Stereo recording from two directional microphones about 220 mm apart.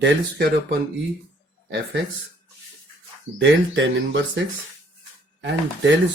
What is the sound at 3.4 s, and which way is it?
Speech, 55° right (ahead or behind).